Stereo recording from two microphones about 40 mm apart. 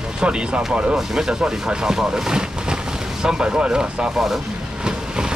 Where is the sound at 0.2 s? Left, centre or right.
Right.